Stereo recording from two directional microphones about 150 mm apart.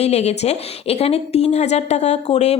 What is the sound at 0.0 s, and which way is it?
A woman's voice, 45° left (ahead or behind).